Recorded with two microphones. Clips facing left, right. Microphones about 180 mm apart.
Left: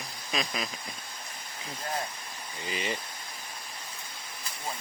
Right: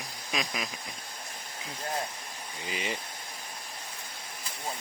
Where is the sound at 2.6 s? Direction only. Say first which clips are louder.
Left 1 dB; 5° right (ahead or behind).